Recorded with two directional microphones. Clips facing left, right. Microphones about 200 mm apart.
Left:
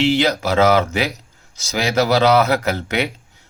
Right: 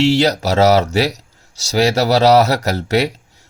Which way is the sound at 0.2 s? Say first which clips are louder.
Right 2 dB; 40° right (ahead or behind).